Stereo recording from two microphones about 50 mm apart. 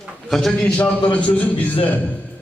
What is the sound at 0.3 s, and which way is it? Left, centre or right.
Speech, centre.